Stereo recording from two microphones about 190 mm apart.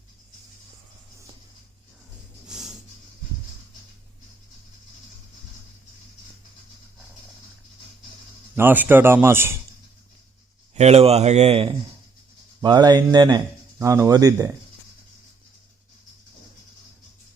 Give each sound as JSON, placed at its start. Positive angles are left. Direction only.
{"t": 2.5, "sound": "a sound", "side_deg": 0}
{"t": 8.5, "sound": "speech", "side_deg": -10}
{"t": 10.8, "sound": "speech", "side_deg": -35}
{"t": 12.6, "sound": "speech", "side_deg": -20}